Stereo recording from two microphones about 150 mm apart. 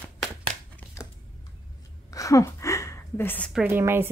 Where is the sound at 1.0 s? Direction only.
20° left (ahead or behind).